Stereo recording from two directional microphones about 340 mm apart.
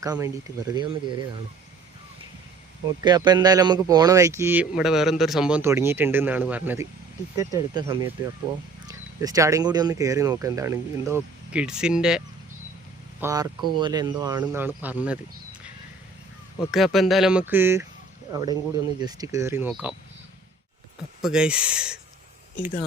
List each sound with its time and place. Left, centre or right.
0.0 s speech: centre
2.8 s speech: centre
16.6 s speech: centre
21.2 s speech: centre